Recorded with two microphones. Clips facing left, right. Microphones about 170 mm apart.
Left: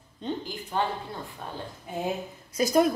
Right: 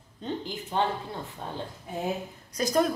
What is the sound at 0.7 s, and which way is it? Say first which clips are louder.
Speech: right 1 dB; 20° right (ahead or behind).